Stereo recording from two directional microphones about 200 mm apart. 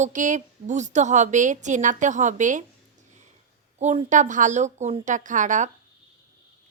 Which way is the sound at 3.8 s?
35° right (ahead or behind).